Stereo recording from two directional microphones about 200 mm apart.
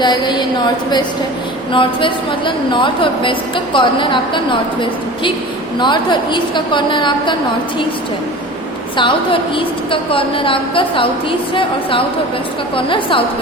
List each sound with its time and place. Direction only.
0.0 s a sound: 20° left (ahead or behind)
1.7 s a woman's voice: 25° left (ahead or behind)
5.8 s a woman's voice: 25° left (ahead or behind)
9.0 s a woman's voice: 25° left (ahead or behind)